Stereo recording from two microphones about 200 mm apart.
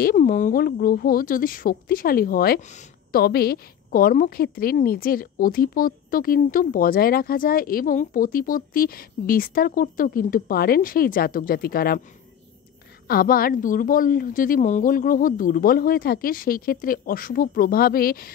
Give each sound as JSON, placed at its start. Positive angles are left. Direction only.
{"t": 0.0, "sound": "a woman's voice", "side_deg": 45}
{"t": 13.1, "sound": "a woman's voice", "side_deg": 45}